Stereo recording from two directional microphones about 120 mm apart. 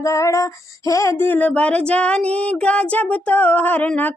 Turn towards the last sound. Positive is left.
turn(degrees=15)  # may be behind; listen again after turning